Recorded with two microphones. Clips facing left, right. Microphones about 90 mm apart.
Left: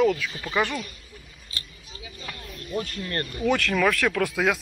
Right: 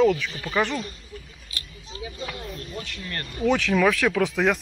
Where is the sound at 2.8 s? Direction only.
40° left (ahead or behind).